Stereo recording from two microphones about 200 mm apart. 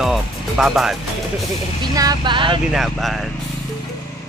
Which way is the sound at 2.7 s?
Centre (ahead or behind).